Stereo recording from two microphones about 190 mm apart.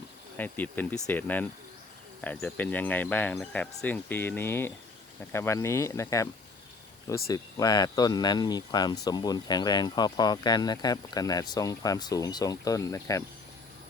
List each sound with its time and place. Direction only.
0.3 s speech: 10° left (ahead or behind)
7.3 s speech: 20° left (ahead or behind)